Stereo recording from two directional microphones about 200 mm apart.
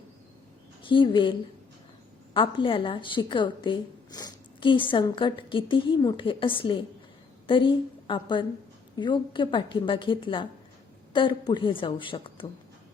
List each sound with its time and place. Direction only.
0.8 s a woman's voice: 25° left (ahead or behind)